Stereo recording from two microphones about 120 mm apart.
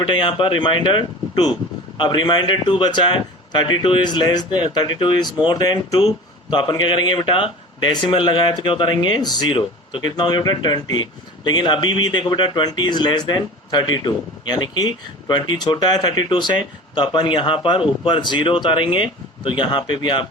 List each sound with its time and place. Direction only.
0.0 s a man's voice: 40° left (ahead or behind)